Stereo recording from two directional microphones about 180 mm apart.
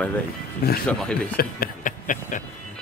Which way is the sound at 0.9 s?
5° left (ahead or behind).